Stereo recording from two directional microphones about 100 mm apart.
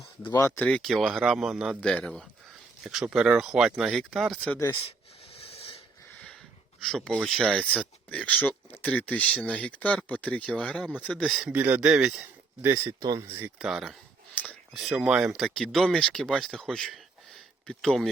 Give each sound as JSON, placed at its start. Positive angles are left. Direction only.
{"t": 0.3, "sound": "speech", "side_deg": 30}
{"t": 0.6, "sound": "speech", "side_deg": 5}
{"t": 1.8, "sound": "speech", "side_deg": 10}
{"t": 2.8, "sound": "speech", "side_deg": -5}
{"t": 5.3, "sound": "snort", "side_deg": 75}
{"t": 6.8, "sound": "speech", "side_deg": 5}
{"t": 11.4, "sound": "speech", "side_deg": -15}
{"t": 12.6, "sound": "speech", "side_deg": -25}
{"t": 13.6, "sound": "speech", "side_deg": -5}
{"t": 15.4, "sound": "speech", "side_deg": 5}